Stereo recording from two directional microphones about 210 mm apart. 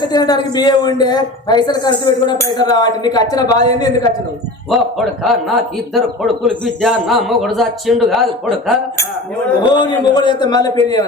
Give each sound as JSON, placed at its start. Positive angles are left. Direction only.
{"t": 0.0, "sound": "a man's voice", "side_deg": 20}
{"t": 4.7, "sound": "a man's voice", "side_deg": 0}
{"t": 9.7, "sound": "a man's voice", "side_deg": 20}